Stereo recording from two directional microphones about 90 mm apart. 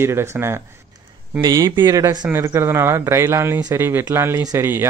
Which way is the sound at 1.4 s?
50° right (ahead or behind).